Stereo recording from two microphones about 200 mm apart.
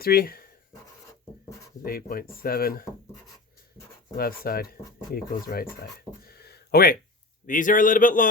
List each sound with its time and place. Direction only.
0.0 s speech: 50° left (ahead or behind)
1.8 s speech: 50° left (ahead or behind)
4.2 s speech: 50° left (ahead or behind)
6.2 s a sound: 50° left (ahead or behind)
7.4 s speech: 40° left (ahead or behind)